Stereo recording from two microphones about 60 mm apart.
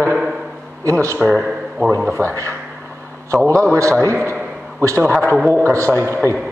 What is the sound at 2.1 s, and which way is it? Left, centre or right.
Speech, right.